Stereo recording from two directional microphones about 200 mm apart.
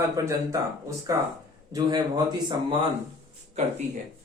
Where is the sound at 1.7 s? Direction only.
20° right (ahead or behind).